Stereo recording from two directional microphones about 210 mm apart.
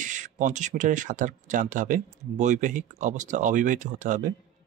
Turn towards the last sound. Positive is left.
turn(degrees=-40)  # may be behind; listen again after turning